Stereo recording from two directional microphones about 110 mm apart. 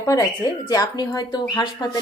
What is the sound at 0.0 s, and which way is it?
Speech, 30° left (ahead or behind).